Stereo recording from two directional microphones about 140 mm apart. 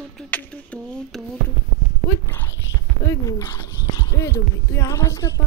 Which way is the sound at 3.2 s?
20° left (ahead or behind).